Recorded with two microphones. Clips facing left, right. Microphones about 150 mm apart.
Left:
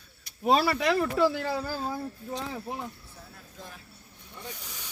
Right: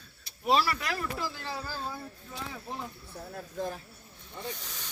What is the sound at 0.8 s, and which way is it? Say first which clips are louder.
Speech: left 10 dB; 75° left (ahead or behind).